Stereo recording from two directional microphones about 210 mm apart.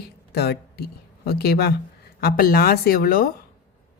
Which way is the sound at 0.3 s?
50° left (ahead or behind).